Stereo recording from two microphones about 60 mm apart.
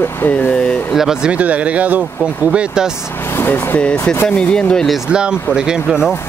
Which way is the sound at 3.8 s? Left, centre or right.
Centre.